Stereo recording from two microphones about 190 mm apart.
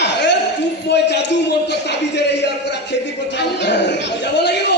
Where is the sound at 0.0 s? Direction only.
65° left (ahead or behind).